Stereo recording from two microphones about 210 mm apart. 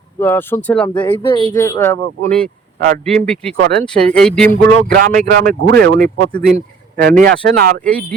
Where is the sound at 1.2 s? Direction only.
25° left (ahead or behind).